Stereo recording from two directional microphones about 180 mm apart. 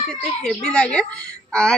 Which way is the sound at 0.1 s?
5° left (ahead or behind).